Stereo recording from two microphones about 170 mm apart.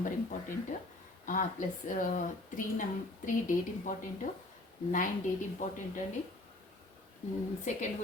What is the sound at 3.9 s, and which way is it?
Speech, 50° left (ahead or behind).